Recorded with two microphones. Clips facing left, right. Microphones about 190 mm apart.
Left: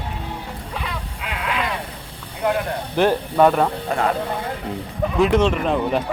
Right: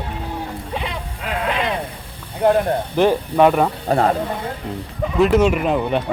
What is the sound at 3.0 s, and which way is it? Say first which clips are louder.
Speech: right 1 dB; 10° right (ahead or behind).